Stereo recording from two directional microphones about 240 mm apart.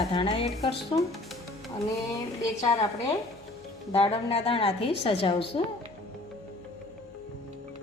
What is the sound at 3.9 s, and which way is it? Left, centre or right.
A woman's voice, left.